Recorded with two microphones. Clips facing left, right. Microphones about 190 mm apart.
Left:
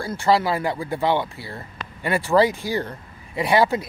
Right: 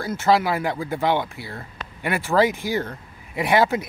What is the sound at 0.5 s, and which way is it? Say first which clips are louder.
Speech: even; centre (ahead or behind).